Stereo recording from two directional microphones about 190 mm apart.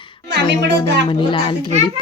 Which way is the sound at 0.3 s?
65° right (ahead or behind).